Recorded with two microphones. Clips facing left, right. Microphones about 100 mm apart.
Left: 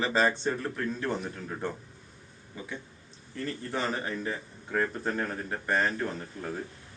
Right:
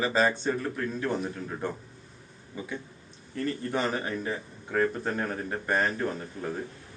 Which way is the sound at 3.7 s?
15° right (ahead or behind).